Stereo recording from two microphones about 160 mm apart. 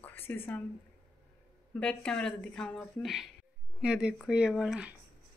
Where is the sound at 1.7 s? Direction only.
5° left (ahead or behind).